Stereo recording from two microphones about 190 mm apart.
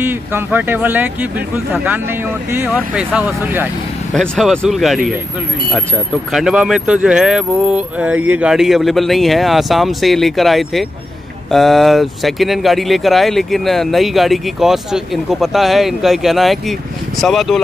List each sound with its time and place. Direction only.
0.0 s speech: 10° right (ahead or behind)
2.5 s speech: 10° right (ahead or behind)
6.3 s speech: 5° right (ahead or behind)